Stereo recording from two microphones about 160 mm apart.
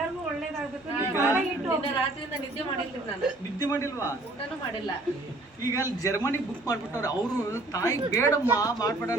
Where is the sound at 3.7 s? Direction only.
15° left (ahead or behind).